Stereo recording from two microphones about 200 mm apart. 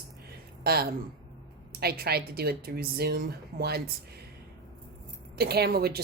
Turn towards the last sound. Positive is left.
turn(degrees=-50)  # may be behind; listen again after turning